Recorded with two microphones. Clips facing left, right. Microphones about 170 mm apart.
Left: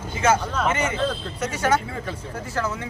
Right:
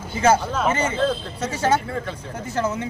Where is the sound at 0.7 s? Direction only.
30° right (ahead or behind).